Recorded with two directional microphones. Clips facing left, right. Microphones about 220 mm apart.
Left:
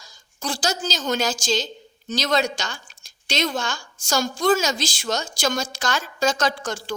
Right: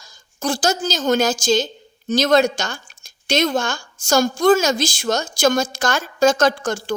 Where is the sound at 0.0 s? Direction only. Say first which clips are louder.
Right 7 dB; 50° right (ahead or behind).